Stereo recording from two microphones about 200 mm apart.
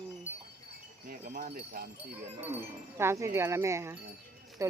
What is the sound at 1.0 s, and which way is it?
Wind chime, 40° right (ahead or behind).